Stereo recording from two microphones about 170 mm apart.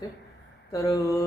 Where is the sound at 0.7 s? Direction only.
20° left (ahead or behind).